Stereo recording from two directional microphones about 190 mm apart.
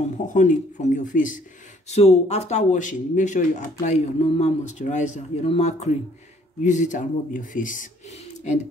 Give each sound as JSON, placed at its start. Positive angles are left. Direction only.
{"t": 0.3, "sound": "speech", "side_deg": 40}